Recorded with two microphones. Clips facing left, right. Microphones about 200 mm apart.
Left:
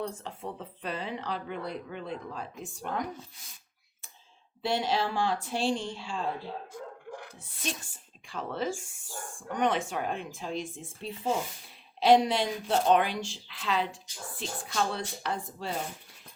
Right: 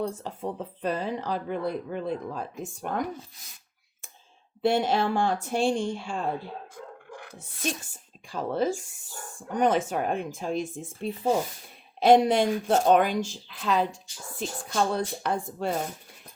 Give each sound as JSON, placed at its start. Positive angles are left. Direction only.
{"t": 0.1, "sound": "speech", "side_deg": -40}
{"t": 4.6, "sound": "speech", "side_deg": -50}
{"t": 8.3, "sound": "speech", "side_deg": -40}